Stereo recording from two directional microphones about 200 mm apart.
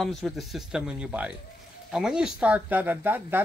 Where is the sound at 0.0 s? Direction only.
Centre (ahead or behind).